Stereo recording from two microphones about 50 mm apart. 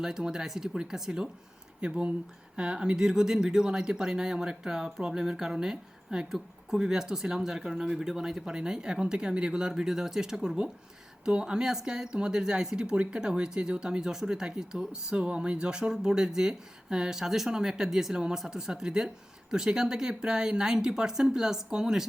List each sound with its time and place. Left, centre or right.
0.0 s speech: centre